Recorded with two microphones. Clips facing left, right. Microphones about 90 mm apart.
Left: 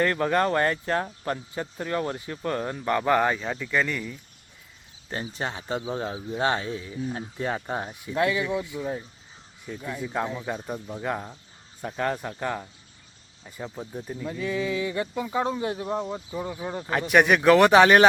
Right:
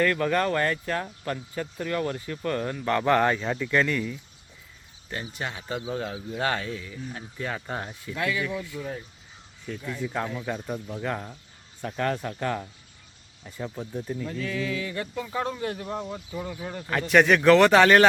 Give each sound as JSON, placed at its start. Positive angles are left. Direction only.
{"t": 0.0, "sound": "speech", "side_deg": 25}
{"t": 5.0, "sound": "speech", "side_deg": 30}